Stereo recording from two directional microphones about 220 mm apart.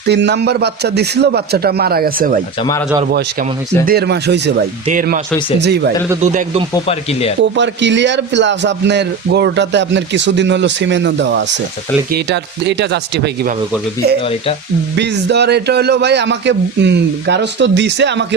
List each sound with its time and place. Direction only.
0.1 s speech: 50° right (ahead or behind)
3.8 s speech: 45° right (ahead or behind)
4.9 s speech: 35° right (ahead or behind)
5.5 s speech: 50° right (ahead or behind)
6.2 s speech: 35° right (ahead or behind)
6.8 s speech: 25° left (ahead or behind)
7.5 s speech: 55° right (ahead or behind)
14.9 s speech: 50° right (ahead or behind)